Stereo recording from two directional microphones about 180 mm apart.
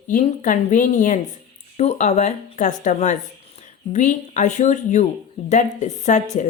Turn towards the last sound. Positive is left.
turn(degrees=40)  # may be behind; listen again after turning